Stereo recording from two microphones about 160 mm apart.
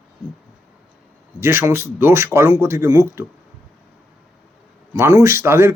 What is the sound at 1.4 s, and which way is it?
Speech, 15° right (ahead or behind).